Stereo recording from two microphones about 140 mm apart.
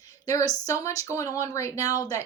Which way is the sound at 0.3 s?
25° left (ahead or behind).